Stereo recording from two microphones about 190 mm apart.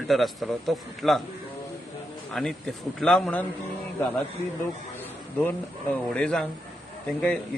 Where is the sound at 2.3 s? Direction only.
Centre (ahead or behind).